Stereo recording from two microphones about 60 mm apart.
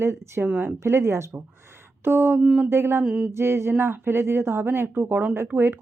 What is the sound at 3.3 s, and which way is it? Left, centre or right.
Speech, right.